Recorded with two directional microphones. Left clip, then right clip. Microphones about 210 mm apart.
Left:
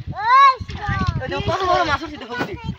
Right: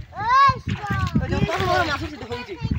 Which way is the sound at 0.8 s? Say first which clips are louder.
Left 2 dB; 35° left (ahead or behind).